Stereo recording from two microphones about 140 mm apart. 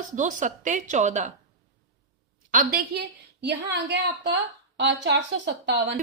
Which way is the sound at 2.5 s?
90° right.